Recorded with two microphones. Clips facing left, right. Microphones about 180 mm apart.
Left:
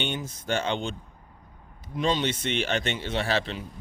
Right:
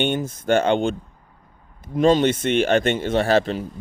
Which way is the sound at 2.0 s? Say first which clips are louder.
Right 10 dB; 50° right (ahead or behind).